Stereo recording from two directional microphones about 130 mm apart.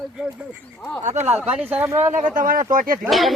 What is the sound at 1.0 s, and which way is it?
Speech, 60° right (ahead or behind).